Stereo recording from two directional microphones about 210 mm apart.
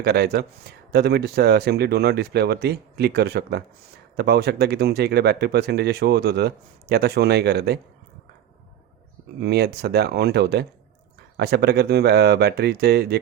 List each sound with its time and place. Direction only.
0.0 s speech: 50° right (ahead or behind)
9.4 s speech: 50° right (ahead or behind)